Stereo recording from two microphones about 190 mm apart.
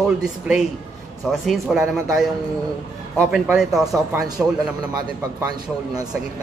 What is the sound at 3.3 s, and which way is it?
Speech, 5° right (ahead or behind).